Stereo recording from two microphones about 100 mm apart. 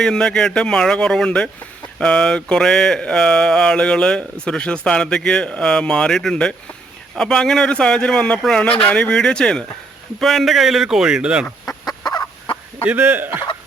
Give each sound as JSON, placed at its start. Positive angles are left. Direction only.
{"t": 0.0, "sound": "speech", "side_deg": 5}
{"t": 11.9, "sound": "fowl", "side_deg": 40}
{"t": 12.8, "sound": "a man's voice", "side_deg": -15}